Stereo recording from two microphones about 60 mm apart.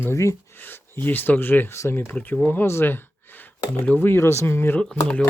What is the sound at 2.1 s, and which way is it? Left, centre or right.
Speech, left.